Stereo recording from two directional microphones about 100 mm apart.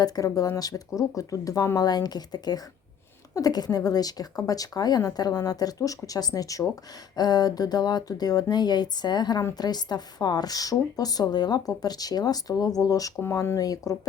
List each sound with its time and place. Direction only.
0.0 s a woman's voice: 35° left (ahead or behind)